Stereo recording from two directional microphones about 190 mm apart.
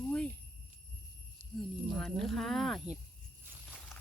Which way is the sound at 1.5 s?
Centre (ahead or behind).